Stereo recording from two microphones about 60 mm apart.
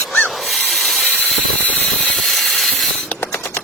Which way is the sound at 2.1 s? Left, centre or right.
Centre.